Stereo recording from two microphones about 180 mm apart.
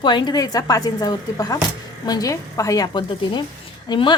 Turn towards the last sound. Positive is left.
turn(degrees=25)  # may be behind; listen again after turning